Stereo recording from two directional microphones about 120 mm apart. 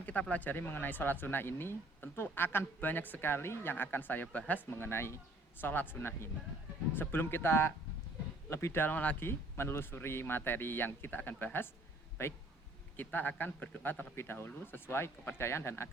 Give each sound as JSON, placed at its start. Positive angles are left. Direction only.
{"t": 0.0, "sound": "a man's voice", "side_deg": 10}
{"t": 13.0, "sound": "a man's voice", "side_deg": 15}